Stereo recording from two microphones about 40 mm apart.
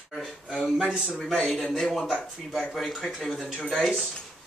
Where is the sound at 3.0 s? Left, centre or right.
Left.